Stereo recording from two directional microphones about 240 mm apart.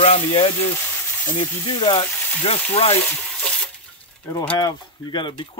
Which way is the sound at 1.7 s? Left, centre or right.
Centre.